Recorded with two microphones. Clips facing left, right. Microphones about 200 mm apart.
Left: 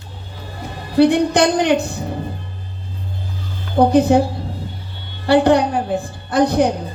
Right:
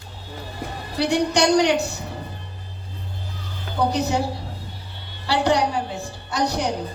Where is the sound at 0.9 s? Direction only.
55° left (ahead or behind).